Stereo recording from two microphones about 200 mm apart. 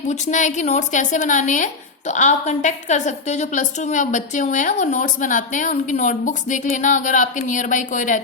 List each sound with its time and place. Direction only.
0.1 s a woman's voice: 35° left (ahead or behind)